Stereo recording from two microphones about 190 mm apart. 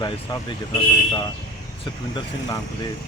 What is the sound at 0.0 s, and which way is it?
Speech, 25° left (ahead or behind).